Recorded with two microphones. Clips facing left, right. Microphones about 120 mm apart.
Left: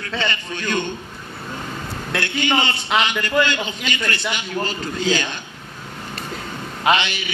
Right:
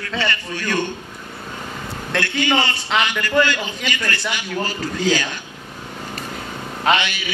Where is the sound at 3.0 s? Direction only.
25° left (ahead or behind).